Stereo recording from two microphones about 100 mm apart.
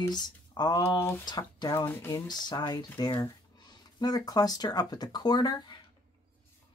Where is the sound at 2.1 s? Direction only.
40° left (ahead or behind).